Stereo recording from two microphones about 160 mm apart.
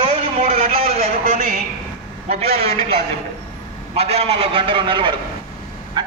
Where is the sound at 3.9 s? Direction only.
40° right (ahead or behind).